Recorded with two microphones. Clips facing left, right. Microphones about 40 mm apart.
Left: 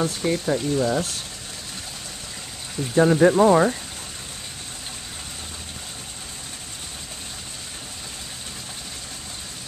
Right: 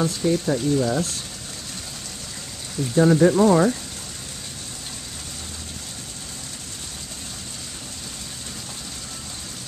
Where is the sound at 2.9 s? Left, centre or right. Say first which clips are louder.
Even; centre.